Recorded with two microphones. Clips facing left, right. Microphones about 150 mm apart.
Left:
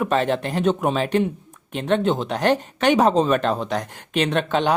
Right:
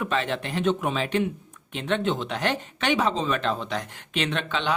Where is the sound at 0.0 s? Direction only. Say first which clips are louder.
Left 6 dB; 45° left (ahead or behind).